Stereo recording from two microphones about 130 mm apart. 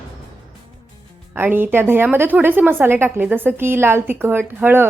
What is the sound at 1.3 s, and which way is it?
A woman's voice, 15° right (ahead or behind).